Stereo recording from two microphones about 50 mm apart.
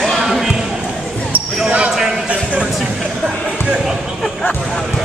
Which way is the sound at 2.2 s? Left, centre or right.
Right.